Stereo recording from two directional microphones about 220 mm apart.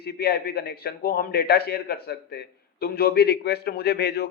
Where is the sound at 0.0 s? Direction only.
45° left (ahead or behind).